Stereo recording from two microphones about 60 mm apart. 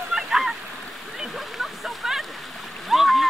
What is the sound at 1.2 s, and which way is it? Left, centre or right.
Splash, centre.